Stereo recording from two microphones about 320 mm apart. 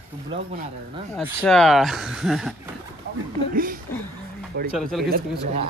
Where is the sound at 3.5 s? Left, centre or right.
Right.